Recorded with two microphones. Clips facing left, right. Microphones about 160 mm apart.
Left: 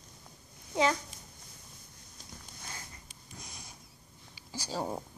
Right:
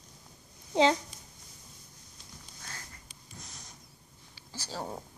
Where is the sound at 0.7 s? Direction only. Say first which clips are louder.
Right 4 dB; 30° right (ahead or behind).